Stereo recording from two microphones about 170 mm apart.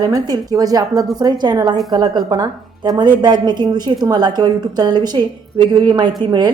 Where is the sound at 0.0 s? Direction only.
20° right (ahead or behind).